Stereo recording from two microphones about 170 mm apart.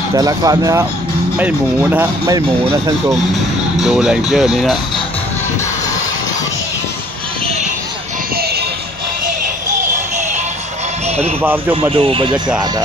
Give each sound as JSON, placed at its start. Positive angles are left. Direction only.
{"t": 0.1, "sound": "speech", "side_deg": -20}
{"t": 3.8, "sound": "speech", "side_deg": -5}
{"t": 11.4, "sound": "speech", "side_deg": -10}
{"t": 11.9, "sound": "speech", "side_deg": -30}